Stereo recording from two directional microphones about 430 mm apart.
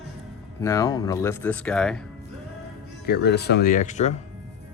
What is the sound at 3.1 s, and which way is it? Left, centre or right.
Speech, left.